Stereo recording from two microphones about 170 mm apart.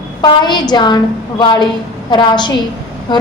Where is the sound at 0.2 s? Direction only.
25° left (ahead or behind).